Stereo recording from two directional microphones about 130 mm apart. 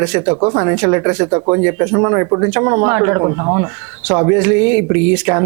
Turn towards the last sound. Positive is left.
turn(degrees=-20)  # may be behind; listen again after turning